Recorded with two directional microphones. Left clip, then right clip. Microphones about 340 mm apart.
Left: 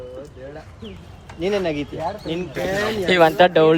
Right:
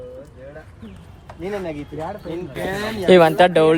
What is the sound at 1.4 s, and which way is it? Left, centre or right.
Speech, left.